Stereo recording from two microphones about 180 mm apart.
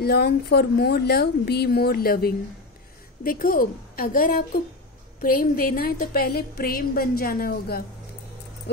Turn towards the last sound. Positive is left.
turn(degrees=55)  # may be behind; listen again after turning